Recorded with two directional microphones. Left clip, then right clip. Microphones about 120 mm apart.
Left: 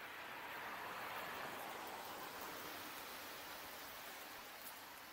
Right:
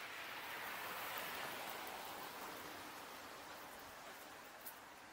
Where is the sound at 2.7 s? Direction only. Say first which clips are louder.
Left 1 dB; 20° left (ahead or behind).